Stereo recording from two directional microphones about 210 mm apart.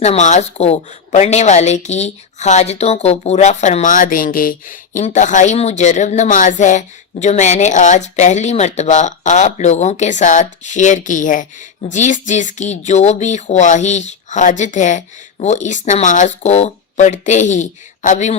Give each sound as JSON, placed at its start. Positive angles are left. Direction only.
{"t": 0.0, "sound": "a woman's voice", "side_deg": 30}